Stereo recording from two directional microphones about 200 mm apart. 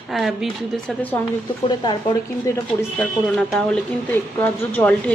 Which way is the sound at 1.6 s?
20° left (ahead or behind).